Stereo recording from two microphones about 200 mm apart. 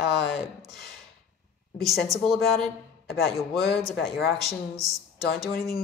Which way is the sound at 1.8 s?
15° right (ahead or behind).